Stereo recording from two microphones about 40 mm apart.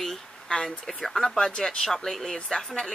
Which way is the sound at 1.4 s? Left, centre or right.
Centre.